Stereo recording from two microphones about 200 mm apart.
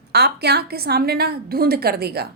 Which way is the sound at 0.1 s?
55° right (ahead or behind).